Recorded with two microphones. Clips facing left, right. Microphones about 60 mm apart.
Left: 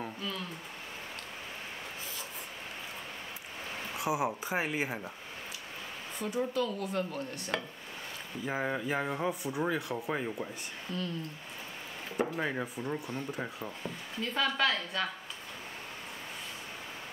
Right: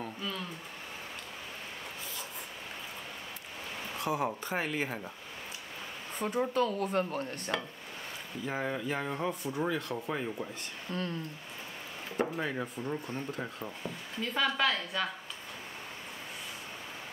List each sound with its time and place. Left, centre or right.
3.9 s speech: centre
6.1 s dishes: right
8.5 s speech: centre
10.9 s speech: right
12.4 s speech: centre